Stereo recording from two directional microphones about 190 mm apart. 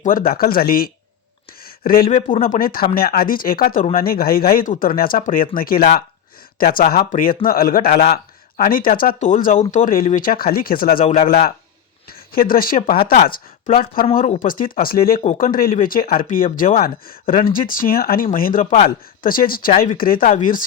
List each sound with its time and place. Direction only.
0.0 s a man's voice: 45° left (ahead or behind)
2.0 s speech: 30° left (ahead or behind)
2.4 s a man's voice: 50° left (ahead or behind)
12.3 s a man's voice: 50° left (ahead or behind)
18.6 s speech: 35° left (ahead or behind)
18.9 s a man's voice: 50° left (ahead or behind)
20.2 s speech: 30° left (ahead or behind)